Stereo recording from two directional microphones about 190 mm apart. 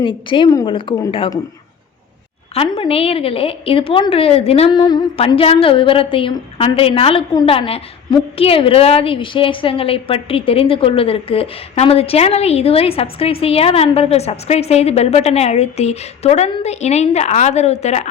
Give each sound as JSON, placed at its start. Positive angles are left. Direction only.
{"t": 0.0, "sound": "a woman's voice", "side_deg": 25}
{"t": 2.6, "sound": "a woman's voice", "side_deg": 30}